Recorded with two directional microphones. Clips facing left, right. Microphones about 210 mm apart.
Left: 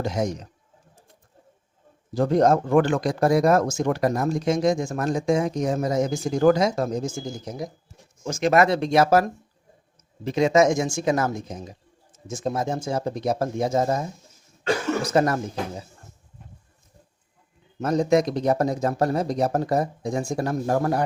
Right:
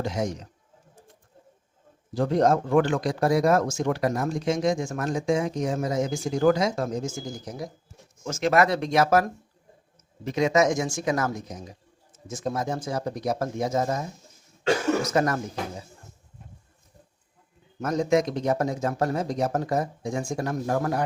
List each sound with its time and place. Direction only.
0.0 s speech: 45° left (ahead or behind)
2.1 s speech: 45° left (ahead or behind)
7.3 s speech: 25° left (ahead or behind)
15.0 s speech: 30° left (ahead or behind)
17.7 s speech: 30° left (ahead or behind)